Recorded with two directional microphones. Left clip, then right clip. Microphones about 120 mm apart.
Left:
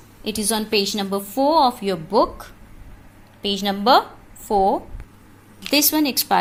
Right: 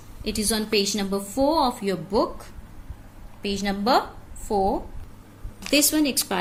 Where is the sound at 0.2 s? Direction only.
20° left (ahead or behind).